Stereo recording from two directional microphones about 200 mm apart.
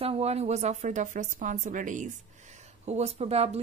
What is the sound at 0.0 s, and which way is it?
Speech, 30° right (ahead or behind).